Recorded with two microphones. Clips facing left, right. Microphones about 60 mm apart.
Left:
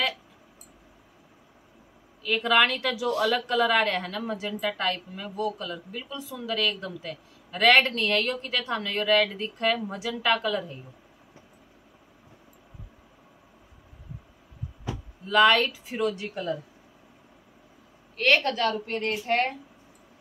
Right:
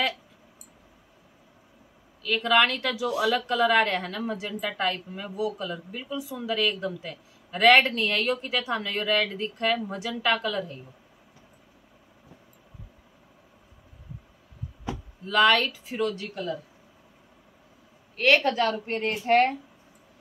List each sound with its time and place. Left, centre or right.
2.2 s a woman's voice: centre
15.2 s a woman's voice: centre
16.2 s speech: centre
18.1 s a woman's voice: centre
18.6 s a woman's voice: centre